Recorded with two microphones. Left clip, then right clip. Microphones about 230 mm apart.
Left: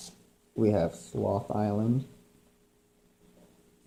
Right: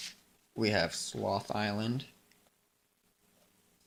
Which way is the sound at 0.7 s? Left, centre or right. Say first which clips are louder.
Left 3 dB; right.